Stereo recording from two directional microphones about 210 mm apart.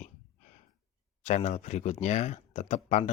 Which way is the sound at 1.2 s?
30° left (ahead or behind).